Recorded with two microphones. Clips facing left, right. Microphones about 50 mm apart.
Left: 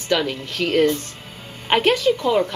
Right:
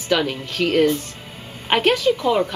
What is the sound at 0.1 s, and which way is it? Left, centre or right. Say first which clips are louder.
A woman's voice: right 1 dB; centre.